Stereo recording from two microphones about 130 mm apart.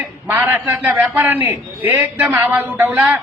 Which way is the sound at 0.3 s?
15° right (ahead or behind).